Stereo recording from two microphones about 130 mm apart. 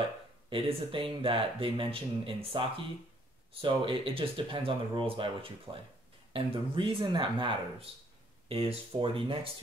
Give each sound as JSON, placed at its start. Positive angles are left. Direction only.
{"t": 0.5, "sound": "speech", "side_deg": -40}
{"t": 3.6, "sound": "speech", "side_deg": -40}